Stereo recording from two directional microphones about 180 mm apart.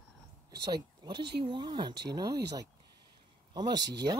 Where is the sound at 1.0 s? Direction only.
20° right (ahead or behind).